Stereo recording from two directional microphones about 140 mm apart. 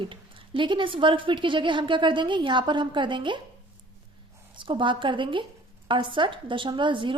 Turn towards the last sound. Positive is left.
turn(degrees=-35)  # may be behind; listen again after turning